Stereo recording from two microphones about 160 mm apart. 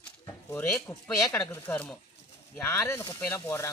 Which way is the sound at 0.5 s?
15° left (ahead or behind).